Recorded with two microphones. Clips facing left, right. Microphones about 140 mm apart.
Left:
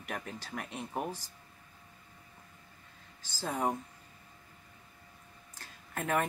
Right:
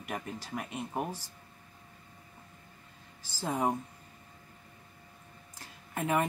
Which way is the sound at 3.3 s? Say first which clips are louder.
Right 2 dB; 10° right (ahead or behind).